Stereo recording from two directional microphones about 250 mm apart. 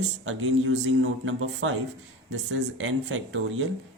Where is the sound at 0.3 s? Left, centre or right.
Right.